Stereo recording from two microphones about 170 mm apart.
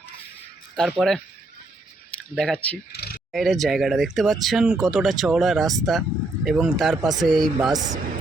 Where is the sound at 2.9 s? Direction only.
65° left (ahead or behind).